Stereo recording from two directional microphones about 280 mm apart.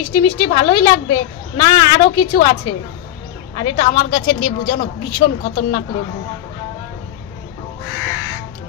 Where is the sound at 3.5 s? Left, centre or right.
Centre.